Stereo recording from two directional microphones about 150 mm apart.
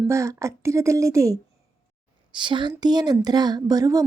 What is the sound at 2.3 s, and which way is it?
A woman's voice, 30° right (ahead or behind).